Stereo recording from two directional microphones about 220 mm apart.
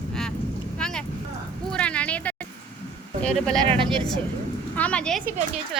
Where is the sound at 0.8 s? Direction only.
5° left (ahead or behind).